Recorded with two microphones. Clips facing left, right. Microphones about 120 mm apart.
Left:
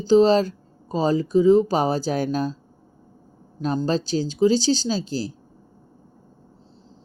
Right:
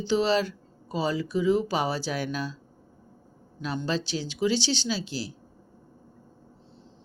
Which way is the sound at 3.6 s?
40° left (ahead or behind).